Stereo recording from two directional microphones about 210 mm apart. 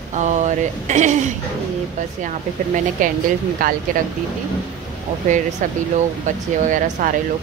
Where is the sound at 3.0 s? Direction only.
40° right (ahead or behind).